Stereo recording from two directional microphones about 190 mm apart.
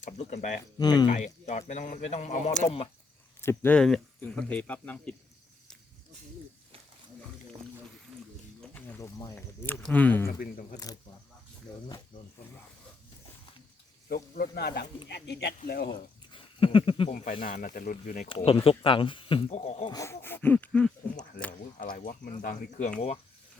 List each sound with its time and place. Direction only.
0.0 s speech: 40° left (ahead or behind)
0.8 s speech: 20° left (ahead or behind)
1.1 s speech: 40° left (ahead or behind)
3.4 s speech: 10° left (ahead or behind)
8.6 s a sound: 10° left (ahead or behind)
9.1 s speech: 15° left (ahead or behind)
10.2 s speech: 50° left (ahead or behind)
14.1 s speech: 55° left (ahead or behind)
16.3 s a sound: 25° left (ahead or behind)
17.1 s speech: 45° left (ahead or behind)
18.3 s speech: 25° left (ahead or behind)
19.9 s speech: 15° left (ahead or behind)
21.8 s speech: 45° left (ahead or behind)